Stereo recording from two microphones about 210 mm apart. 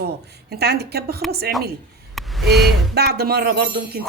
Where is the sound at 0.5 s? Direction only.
50° right (ahead or behind).